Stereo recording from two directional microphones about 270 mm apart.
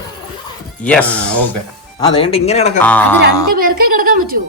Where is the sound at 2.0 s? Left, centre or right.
Centre.